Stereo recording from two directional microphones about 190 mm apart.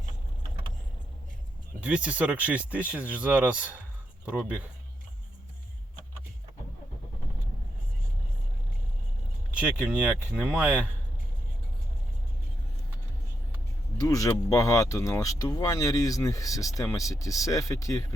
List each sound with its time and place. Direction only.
1.8 s speech: 5° right (ahead or behind)
10.0 s speech: 5° right (ahead or behind)
14.0 s speech: 15° left (ahead or behind)